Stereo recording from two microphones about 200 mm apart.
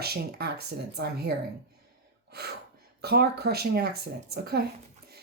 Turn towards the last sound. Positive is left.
turn(degrees=-55)  # may be behind; listen again after turning